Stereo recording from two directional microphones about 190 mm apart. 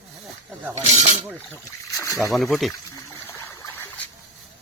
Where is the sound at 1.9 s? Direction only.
20° left (ahead or behind).